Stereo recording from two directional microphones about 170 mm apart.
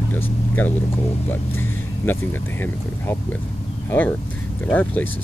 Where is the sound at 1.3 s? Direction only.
10° left (ahead or behind).